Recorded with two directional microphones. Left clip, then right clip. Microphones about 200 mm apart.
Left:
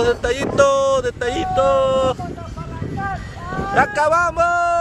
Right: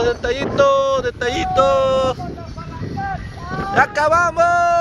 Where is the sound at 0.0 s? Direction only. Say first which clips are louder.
Left 1 dB; 20° left (ahead or behind).